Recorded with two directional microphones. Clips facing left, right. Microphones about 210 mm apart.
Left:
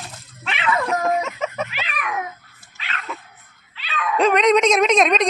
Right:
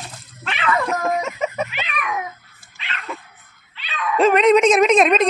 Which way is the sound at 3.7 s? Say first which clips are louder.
Right 1 dB; 5° right (ahead or behind).